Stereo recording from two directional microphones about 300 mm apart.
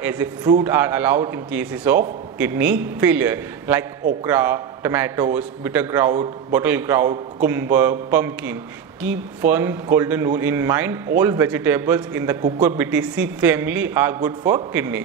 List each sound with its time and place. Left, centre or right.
0.0 s a man's voice: centre